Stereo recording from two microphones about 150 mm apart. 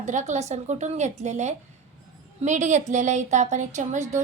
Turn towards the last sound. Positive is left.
turn(degrees=-50)  # may be behind; listen again after turning